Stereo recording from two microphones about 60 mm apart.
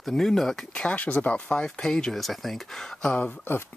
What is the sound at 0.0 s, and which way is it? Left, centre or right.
Speech, centre.